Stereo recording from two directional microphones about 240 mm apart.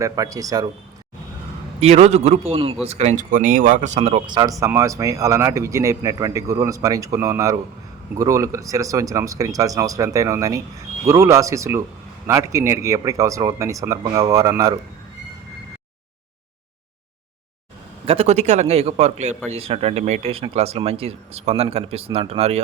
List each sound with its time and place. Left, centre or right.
0.0 s speech: centre
1.8 s speech: right
18.0 s speech: right